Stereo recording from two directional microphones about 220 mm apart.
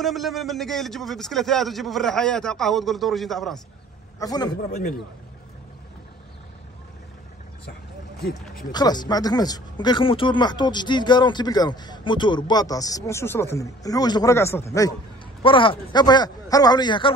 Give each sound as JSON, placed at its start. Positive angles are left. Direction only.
{"t": 0.0, "sound": "a man's voice", "side_deg": 0}
{"t": 4.2, "sound": "a man's voice", "side_deg": 15}
{"t": 4.6, "sound": "a man's voice", "side_deg": 45}
{"t": 8.7, "sound": "speech", "side_deg": 20}